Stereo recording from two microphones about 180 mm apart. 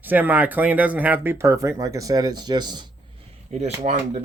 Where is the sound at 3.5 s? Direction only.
40° right (ahead or behind).